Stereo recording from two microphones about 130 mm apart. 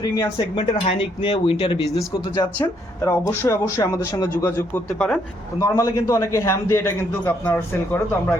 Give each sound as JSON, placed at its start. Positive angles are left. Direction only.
{"t": 0.0, "sound": "a man's voice", "side_deg": 30}
{"t": 0.5, "sound": "speech", "side_deg": 50}
{"t": 2.6, "sound": "a man's voice", "side_deg": 20}
{"t": 4.5, "sound": "speech", "side_deg": 15}
{"t": 5.5, "sound": "a man's voice", "side_deg": 25}